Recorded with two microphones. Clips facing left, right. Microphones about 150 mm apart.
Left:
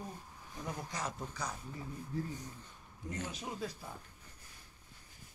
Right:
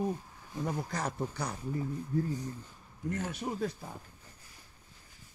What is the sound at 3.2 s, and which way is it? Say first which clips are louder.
Speech: right 5 dB; 55° right (ahead or behind).